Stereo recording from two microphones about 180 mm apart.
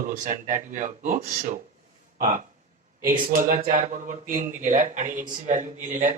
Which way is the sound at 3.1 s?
50° right (ahead or behind).